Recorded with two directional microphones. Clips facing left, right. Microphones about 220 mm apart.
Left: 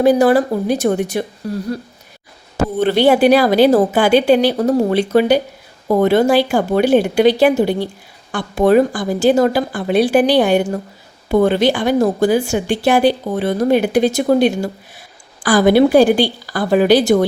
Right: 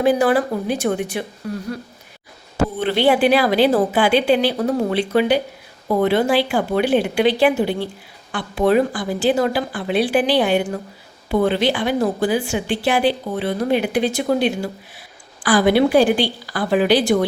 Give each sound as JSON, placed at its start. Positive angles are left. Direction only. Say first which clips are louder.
{"t": 0.0, "sound": "speech", "louder": "left 5 dB", "side_deg": 40}
{"t": 2.7, "sound": "a woman's voice", "louder": "left 5 dB", "side_deg": 45}